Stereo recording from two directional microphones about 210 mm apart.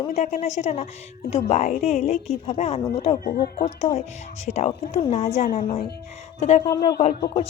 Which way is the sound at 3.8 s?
30° left (ahead or behind).